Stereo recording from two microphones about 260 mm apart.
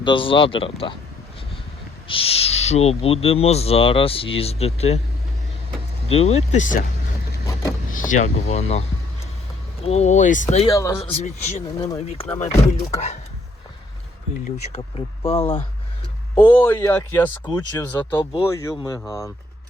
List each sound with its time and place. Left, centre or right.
0.0 s speech: centre
2.0 s speech: left
6.1 s speech: left
7.9 s speech: left
9.8 s speech: left
10.7 s speech: centre
14.9 s speech: left
16.4 s speech: centre